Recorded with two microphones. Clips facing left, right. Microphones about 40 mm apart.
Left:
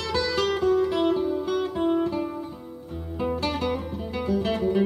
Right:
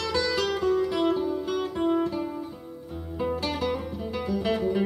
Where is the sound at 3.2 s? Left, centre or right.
Centre.